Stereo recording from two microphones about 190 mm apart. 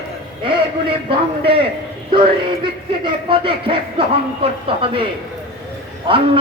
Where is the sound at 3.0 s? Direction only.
25° right (ahead or behind).